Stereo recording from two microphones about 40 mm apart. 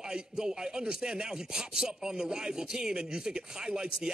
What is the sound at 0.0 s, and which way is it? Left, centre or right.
Speech, centre.